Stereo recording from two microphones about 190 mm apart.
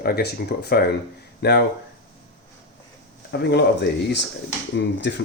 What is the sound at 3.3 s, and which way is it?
Speech, 65° left (ahead or behind).